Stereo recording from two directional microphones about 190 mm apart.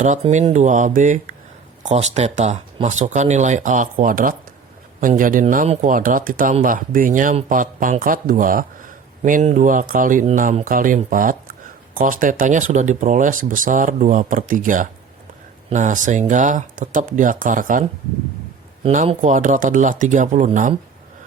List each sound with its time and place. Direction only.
0.0 s speech: 40° right (ahead or behind)